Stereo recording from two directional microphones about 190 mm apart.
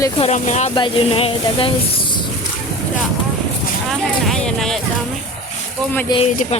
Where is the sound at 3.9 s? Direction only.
Centre (ahead or behind).